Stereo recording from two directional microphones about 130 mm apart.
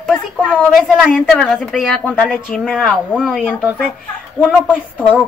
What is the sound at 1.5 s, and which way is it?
Speech, centre (ahead or behind).